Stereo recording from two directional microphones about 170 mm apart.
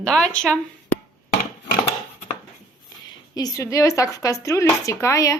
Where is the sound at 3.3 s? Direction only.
20° left (ahead or behind).